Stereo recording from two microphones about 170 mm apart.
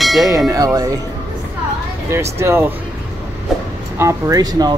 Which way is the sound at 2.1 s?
15° right (ahead or behind).